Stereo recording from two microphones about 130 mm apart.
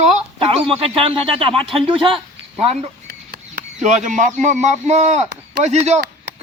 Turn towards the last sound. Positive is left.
turn(degrees=-55)  # may be behind; listen again after turning